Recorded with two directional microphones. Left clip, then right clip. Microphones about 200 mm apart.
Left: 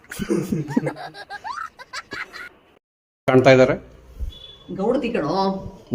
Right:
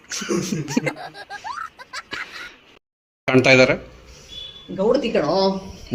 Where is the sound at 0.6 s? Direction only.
5° left (ahead or behind).